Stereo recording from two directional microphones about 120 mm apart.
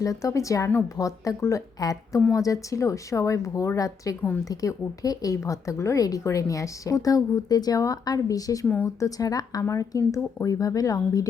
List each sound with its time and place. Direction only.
0.0 s speech: 25° left (ahead or behind)
8.6 s speech: 15° left (ahead or behind)
9.0 s speech: 30° left (ahead or behind)